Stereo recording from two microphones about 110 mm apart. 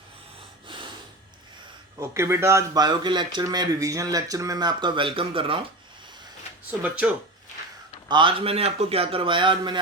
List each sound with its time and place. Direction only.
0.7 s snort: 50° right (ahead or behind)
2.0 s a man's voice: 25° right (ahead or behind)
2.7 s speech: 40° right (ahead or behind); by 5.5 s 55° right (ahead or behind)
6.7 s speech: 15° right (ahead or behind)
8.0 s a man's voice: 45° right (ahead or behind)